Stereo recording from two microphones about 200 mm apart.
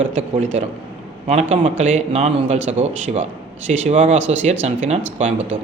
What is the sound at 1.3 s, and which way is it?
Speech, 35° right (ahead or behind).